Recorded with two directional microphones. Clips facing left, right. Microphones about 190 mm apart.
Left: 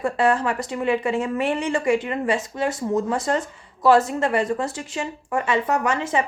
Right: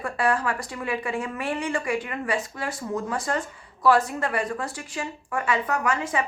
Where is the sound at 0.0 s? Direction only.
25° left (ahead or behind).